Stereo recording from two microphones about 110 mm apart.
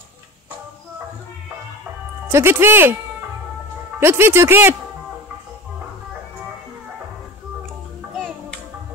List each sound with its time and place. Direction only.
2.2 s speech: 20° right (ahead or behind)
4.0 s speech: 20° right (ahead or behind)